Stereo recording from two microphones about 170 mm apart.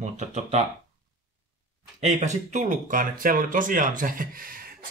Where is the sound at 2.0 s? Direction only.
45° right (ahead or behind).